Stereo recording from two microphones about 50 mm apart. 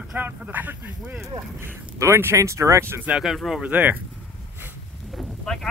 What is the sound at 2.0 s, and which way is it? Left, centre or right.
Speech, right.